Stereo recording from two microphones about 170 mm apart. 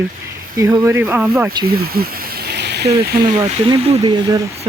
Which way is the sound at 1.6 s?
65° right (ahead or behind).